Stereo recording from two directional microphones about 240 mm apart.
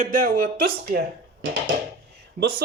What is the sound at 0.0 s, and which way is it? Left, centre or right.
Speech, right.